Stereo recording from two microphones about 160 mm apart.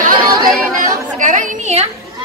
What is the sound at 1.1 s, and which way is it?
Speech, 50° right (ahead or behind).